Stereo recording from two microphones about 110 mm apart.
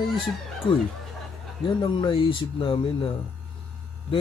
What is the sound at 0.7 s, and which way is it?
Speech, 50° left (ahead or behind).